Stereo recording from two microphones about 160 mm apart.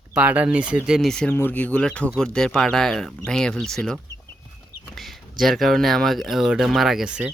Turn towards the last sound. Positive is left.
turn(degrees=-5)  # may be behind; listen again after turning